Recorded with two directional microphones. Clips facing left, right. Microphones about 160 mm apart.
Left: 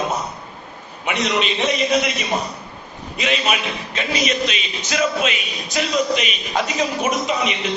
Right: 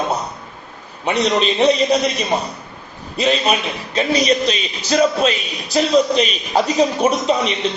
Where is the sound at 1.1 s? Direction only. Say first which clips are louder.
Right 4 dB; 35° right (ahead or behind).